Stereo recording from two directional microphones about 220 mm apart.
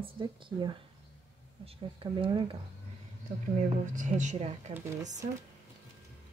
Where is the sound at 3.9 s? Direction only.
35° right (ahead or behind).